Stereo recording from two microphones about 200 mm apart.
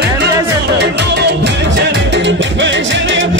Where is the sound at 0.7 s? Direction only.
60° right (ahead or behind).